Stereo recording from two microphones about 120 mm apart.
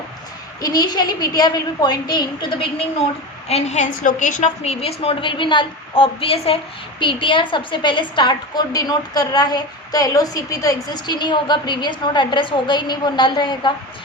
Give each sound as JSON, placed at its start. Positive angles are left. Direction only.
{"t": 0.6, "sound": "a woman's voice", "side_deg": 35}
{"t": 3.5, "sound": "a woman's voice", "side_deg": 75}